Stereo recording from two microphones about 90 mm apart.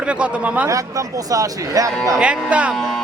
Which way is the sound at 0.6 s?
40° right (ahead or behind).